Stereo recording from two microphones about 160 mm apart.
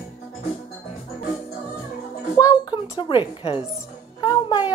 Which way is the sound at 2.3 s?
25° left (ahead or behind).